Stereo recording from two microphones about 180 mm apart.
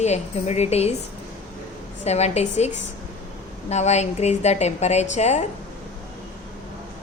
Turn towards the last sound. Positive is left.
turn(degrees=40)  # may be behind; listen again after turning